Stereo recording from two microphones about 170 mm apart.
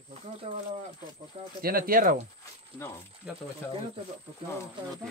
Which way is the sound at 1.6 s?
60° right (ahead or behind).